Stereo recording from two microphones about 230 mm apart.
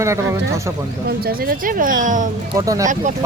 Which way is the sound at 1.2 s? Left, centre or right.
Right.